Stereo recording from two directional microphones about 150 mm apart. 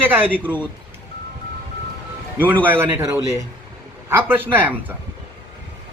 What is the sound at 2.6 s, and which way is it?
Speech, 15° right (ahead or behind).